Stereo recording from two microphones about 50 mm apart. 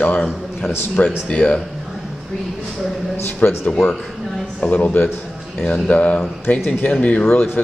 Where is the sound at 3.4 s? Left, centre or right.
Left.